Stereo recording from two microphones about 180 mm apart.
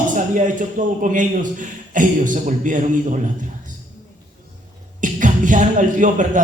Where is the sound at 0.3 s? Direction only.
45° right (ahead or behind).